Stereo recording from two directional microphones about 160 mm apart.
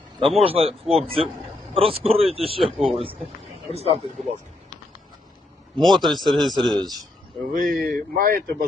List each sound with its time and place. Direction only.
0.2 s speech: 35° right (ahead or behind)
5.7 s speech: centre (ahead or behind)
7.5 s speech: 55° right (ahead or behind)